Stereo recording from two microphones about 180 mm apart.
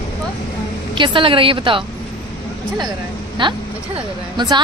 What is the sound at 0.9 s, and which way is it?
Speech, 25° right (ahead or behind).